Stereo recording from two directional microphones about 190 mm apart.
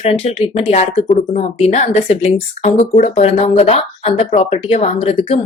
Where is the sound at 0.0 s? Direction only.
30° left (ahead or behind).